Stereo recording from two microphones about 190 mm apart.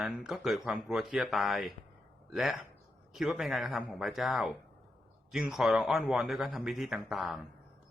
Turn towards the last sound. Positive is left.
turn(degrees=0)  # may be behind; listen again after turning